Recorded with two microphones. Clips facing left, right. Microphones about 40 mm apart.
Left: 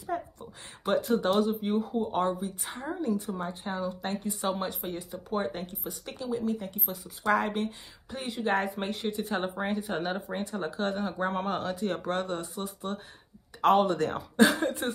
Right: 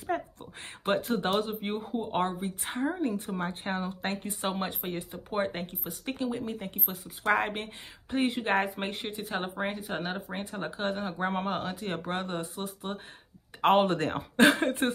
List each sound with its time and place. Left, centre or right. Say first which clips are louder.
0.0 s speech: right 1 dB; right
8.7 s speech: left 3 dB; right
9.2 s speech: right 1 dB; centre
10.3 s speech: left 3 dB; right
13.6 s speech: even; right